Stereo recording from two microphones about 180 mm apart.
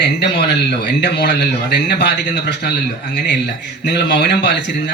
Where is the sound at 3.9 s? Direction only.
70° left (ahead or behind).